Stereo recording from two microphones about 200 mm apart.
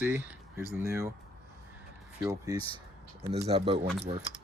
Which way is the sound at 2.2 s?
15° right (ahead or behind).